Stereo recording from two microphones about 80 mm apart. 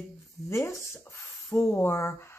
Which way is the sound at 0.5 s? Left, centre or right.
Left.